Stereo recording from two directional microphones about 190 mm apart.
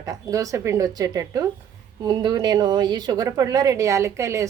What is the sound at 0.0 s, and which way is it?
Speech, 15° right (ahead or behind).